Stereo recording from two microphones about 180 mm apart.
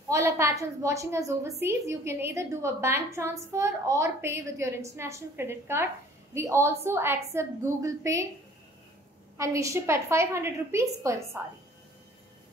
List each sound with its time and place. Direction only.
0.1 s a woman's voice: 15° right (ahead or behind)
9.4 s a woman's voice: 15° right (ahead or behind)